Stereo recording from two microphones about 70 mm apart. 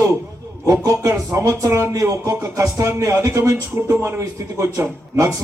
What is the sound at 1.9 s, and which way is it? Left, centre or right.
A man's voice, right.